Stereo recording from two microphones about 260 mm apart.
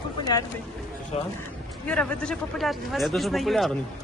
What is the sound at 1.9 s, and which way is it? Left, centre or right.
A man's voice, centre.